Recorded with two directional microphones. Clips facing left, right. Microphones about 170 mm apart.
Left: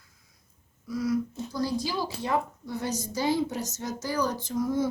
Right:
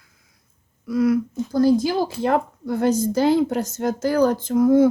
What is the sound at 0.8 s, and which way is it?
A woman's voice, 65° right (ahead or behind).